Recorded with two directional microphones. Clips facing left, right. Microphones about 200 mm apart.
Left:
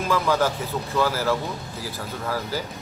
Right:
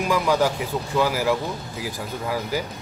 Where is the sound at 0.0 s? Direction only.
15° right (ahead or behind).